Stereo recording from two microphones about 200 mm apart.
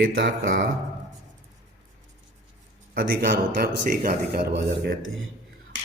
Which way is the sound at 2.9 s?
50° right (ahead or behind).